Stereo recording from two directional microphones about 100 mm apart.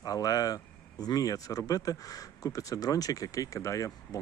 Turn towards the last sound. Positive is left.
turn(degrees=35)  # may be behind; listen again after turning